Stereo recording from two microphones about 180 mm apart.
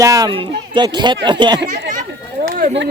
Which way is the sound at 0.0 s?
20° right (ahead or behind).